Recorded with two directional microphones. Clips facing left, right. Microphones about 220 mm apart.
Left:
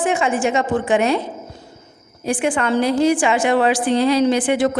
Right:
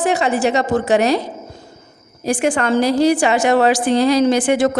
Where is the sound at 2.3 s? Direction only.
45° right (ahead or behind).